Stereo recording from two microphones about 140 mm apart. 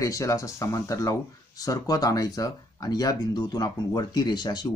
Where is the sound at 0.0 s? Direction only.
25° left (ahead or behind).